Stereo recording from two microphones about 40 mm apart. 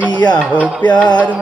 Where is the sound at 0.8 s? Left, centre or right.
Left.